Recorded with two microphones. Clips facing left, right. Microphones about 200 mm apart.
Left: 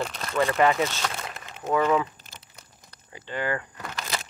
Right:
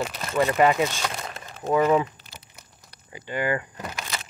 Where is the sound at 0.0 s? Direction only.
5° right (ahead or behind).